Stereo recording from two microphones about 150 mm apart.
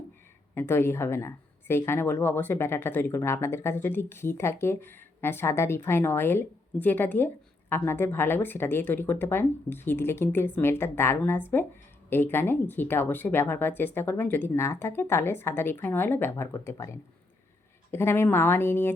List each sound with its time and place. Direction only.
0.5 s speech: 15° left (ahead or behind)